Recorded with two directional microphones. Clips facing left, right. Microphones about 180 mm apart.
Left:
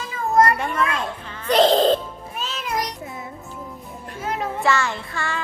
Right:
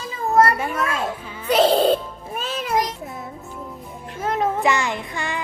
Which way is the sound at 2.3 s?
50° right (ahead or behind).